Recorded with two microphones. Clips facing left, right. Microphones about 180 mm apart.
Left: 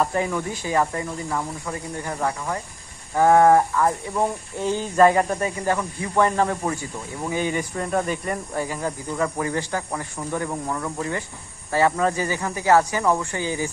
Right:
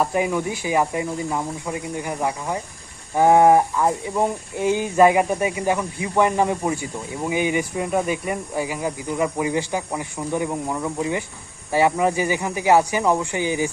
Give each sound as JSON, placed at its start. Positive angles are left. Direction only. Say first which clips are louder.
{"t": 0.0, "sound": "speech", "louder": "right 2 dB", "side_deg": -15}